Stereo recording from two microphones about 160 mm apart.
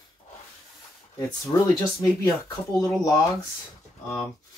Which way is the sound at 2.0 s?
20° left (ahead or behind).